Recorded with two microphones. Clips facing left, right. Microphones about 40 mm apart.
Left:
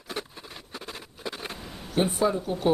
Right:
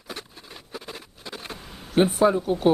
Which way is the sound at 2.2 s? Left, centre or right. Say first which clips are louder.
Right 5 dB; right.